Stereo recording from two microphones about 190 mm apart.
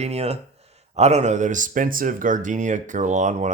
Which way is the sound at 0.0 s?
35° right (ahead or behind).